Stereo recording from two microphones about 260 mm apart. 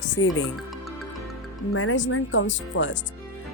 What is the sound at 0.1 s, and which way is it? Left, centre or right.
Speech, left.